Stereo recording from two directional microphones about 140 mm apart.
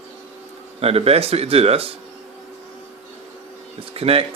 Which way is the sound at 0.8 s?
45° right (ahead or behind).